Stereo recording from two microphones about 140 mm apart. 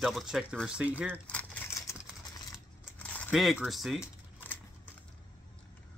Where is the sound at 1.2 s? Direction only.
10° left (ahead or behind).